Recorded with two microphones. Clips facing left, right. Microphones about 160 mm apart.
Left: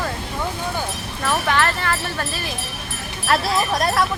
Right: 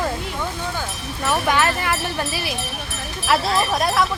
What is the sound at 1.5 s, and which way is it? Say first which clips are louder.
Speech: right 1 dB; 15° right (ahead or behind).